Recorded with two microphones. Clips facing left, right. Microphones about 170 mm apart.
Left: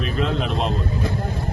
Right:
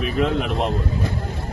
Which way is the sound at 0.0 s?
15° right (ahead or behind).